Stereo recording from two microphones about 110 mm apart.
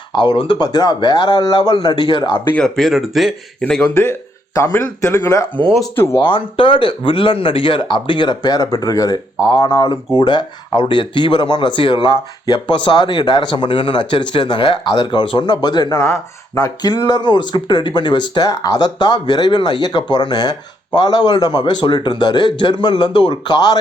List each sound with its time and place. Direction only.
0.1 s speech: 45° left (ahead or behind)
2.5 s speech: 5° left (ahead or behind)
3.9 s speech: 25° left (ahead or behind)
6.1 s speech: 50° left (ahead or behind); by 9.2 s 35° left (ahead or behind)
9.5 s speech: 45° left (ahead or behind)
16.0 s speech: 25° left (ahead or behind); by 23.7 s 40° left (ahead or behind)